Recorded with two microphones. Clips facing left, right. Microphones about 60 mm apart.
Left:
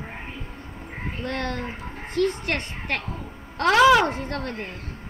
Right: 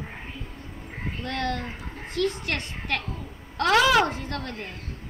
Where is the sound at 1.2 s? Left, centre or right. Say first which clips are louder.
Even; left.